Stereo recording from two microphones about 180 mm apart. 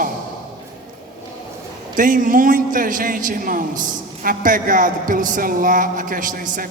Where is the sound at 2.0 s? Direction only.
50° right (ahead or behind).